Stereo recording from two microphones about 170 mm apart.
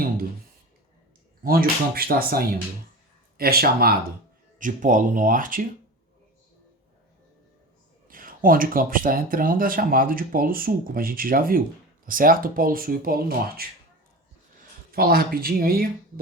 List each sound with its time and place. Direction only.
1.5 s speech: 60° right (ahead or behind)
4.5 s speech: 50° right (ahead or behind)
8.0 s speech: 55° right (ahead or behind)
14.9 s speech: 60° right (ahead or behind)